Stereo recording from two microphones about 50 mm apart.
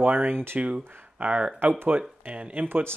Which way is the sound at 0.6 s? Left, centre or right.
Right.